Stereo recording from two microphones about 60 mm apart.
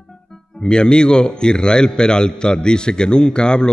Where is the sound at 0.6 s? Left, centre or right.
Centre.